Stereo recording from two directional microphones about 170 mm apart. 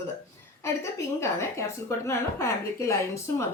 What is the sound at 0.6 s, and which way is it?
A woman's voice, 15° left (ahead or behind).